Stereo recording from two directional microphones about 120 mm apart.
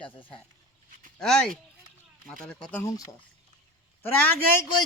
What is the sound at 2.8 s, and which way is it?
Speech, 30° left (ahead or behind).